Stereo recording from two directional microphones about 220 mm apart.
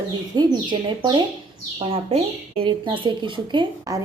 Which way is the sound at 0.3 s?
20° right (ahead or behind).